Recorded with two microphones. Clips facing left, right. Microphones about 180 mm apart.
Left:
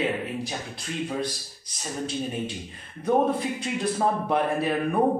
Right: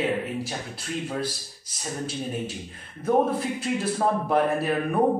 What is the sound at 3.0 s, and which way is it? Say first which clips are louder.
Speech: even; 5° right (ahead or behind).